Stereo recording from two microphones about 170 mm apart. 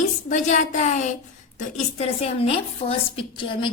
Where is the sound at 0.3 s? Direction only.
45° left (ahead or behind).